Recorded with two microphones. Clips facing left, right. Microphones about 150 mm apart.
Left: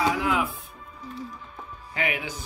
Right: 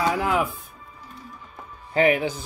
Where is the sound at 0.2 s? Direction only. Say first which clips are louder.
Right 2 dB; 45° right (ahead or behind).